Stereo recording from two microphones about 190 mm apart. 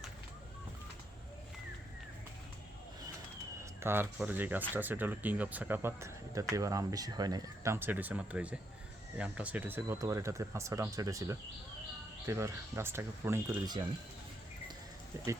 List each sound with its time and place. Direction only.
3.6 s speech: 15° right (ahead or behind)